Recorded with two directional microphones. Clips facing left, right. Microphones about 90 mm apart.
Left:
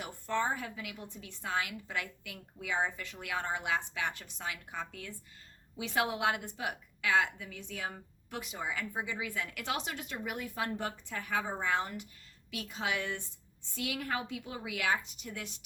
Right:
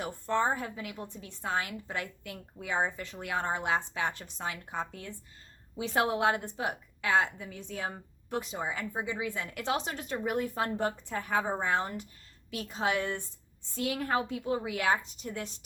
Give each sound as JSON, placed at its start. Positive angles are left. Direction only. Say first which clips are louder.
{"t": 0.0, "sound": "a woman's voice", "louder": "right 4 dB", "side_deg": -35}